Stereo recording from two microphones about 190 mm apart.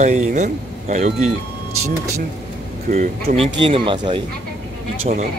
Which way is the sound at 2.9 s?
40° right (ahead or behind).